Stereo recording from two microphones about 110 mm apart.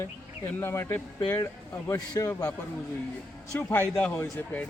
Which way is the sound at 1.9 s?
30° left (ahead or behind).